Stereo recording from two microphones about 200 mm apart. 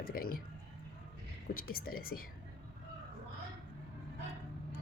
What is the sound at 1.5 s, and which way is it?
Speech, 50° left (ahead or behind).